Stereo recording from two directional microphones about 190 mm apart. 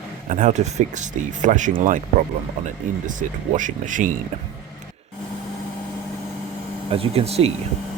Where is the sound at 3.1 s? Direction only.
40° right (ahead or behind).